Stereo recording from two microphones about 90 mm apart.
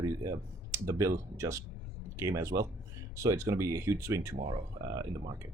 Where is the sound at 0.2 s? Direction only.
35° right (ahead or behind).